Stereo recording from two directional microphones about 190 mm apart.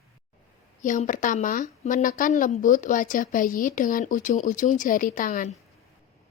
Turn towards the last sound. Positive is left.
turn(degrees=45)  # may be behind; listen again after turning